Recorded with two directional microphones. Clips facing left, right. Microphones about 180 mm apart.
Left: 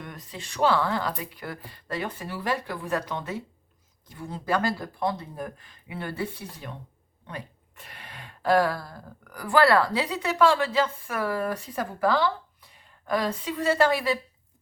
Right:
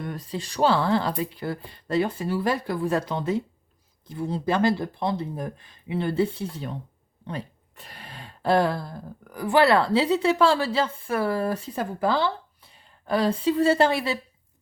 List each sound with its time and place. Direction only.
0.0 s speech: 35° right (ahead or behind)